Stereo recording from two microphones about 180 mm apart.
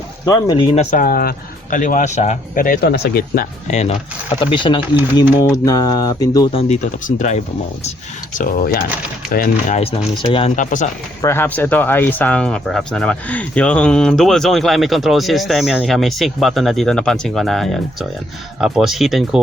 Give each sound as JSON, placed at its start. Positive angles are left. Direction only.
{"t": 0.3, "sound": "speech", "side_deg": 25}
{"t": 3.7, "sound": "speech", "side_deg": 40}
{"t": 4.4, "sound": "a sound", "side_deg": 25}
{"t": 6.5, "sound": "speech", "side_deg": 35}
{"t": 8.3, "sound": "speech", "side_deg": 50}
{"t": 11.2, "sound": "speech", "side_deg": 15}